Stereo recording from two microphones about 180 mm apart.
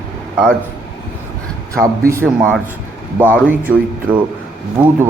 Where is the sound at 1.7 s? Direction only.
15° right (ahead or behind).